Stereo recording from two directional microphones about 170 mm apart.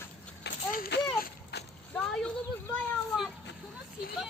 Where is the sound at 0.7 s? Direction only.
60° left (ahead or behind).